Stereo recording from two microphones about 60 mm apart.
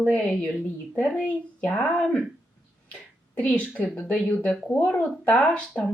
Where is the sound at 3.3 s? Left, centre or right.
Centre.